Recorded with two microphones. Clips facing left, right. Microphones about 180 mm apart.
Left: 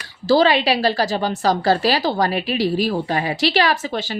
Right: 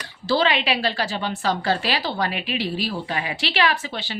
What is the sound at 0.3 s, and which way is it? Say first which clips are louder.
A woman's voice: left 6 dB; 40° left (ahead or behind).